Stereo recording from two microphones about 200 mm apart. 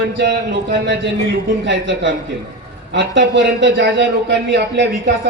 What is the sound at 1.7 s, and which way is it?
A man's voice, 65° right (ahead or behind).